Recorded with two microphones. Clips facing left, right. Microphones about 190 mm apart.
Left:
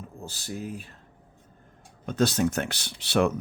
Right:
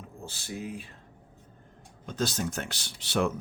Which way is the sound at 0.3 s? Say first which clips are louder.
Left 2 dB; 40° left (ahead or behind).